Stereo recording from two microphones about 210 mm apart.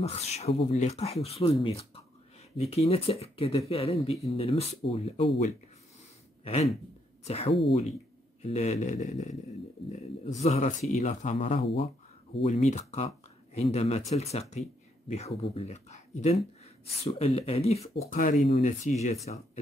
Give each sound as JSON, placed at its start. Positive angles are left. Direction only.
{"t": 0.0, "sound": "speech", "side_deg": 30}
{"t": 6.4, "sound": "a sound", "side_deg": 30}
{"t": 7.2, "sound": "speech", "side_deg": 30}
{"t": 10.4, "sound": "speech", "side_deg": 35}